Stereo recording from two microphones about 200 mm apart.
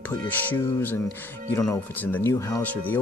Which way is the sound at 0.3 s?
10° left (ahead or behind).